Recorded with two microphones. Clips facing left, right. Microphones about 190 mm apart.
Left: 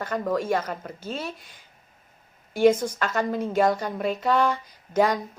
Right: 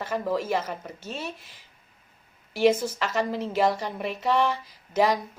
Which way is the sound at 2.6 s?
5° right (ahead or behind).